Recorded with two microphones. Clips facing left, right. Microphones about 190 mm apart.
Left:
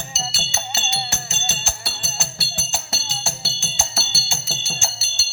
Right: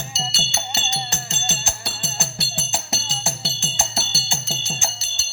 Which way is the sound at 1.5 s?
15° right (ahead or behind).